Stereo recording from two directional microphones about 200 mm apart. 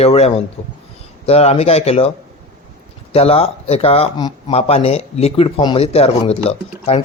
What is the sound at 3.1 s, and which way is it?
Speech, 30° left (ahead or behind).